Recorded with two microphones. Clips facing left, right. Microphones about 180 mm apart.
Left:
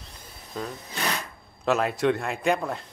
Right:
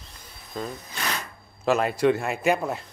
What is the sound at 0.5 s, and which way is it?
Speech, centre (ahead or behind).